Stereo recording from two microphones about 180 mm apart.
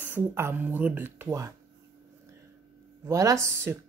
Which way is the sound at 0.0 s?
10° right (ahead or behind).